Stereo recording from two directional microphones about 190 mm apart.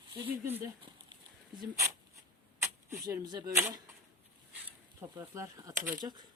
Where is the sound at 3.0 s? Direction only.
20° right (ahead or behind).